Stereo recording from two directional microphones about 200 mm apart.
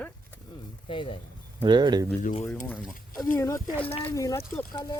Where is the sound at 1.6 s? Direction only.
25° right (ahead or behind).